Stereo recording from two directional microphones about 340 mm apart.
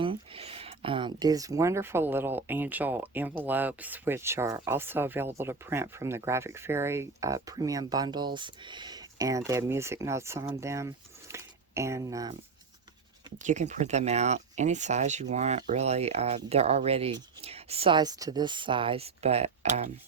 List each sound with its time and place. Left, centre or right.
0.0 s speech: centre
13.4 s speech: right